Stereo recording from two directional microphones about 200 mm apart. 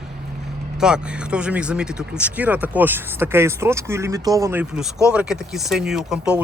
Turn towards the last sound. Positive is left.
turn(degrees=-5)  # may be behind; listen again after turning